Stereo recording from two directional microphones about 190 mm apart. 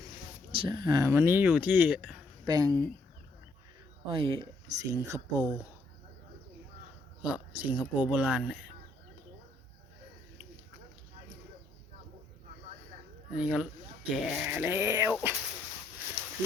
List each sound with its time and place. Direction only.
0.5 s speech: 25° right (ahead or behind); by 2.2 s 5° right (ahead or behind)
2.4 s speech: 20° right (ahead or behind)
4.1 s speech: 25° right (ahead or behind)
4.8 s speech: 15° right (ahead or behind)
7.6 s speech: 10° right (ahead or behind)
13.3 s speech: 5° right (ahead or behind)